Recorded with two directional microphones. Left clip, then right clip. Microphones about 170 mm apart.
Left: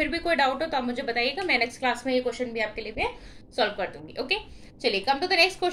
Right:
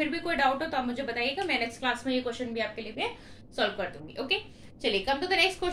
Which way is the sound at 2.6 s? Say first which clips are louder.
Left 3 dB; 25° left (ahead or behind).